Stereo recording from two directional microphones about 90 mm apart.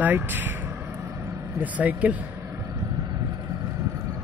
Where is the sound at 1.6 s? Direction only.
15° right (ahead or behind).